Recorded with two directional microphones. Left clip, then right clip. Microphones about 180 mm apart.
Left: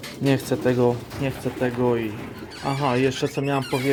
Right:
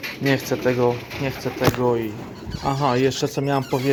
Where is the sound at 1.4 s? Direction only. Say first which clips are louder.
Right 4 dB; 5° left (ahead or behind).